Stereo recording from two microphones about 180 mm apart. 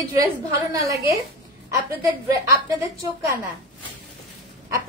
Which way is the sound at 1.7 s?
15° right (ahead or behind).